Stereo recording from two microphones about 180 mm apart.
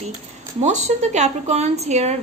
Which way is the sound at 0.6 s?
40° right (ahead or behind).